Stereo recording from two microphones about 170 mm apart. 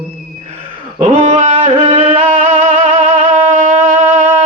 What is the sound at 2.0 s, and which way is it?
Music, 45° right (ahead or behind).